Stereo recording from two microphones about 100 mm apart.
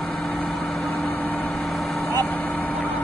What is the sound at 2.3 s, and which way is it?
Vehicle, 15° left (ahead or behind).